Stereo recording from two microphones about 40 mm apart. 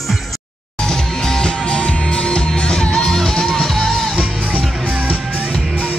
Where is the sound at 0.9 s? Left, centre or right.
Centre.